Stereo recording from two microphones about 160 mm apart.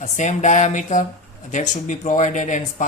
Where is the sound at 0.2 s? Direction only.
50° left (ahead or behind).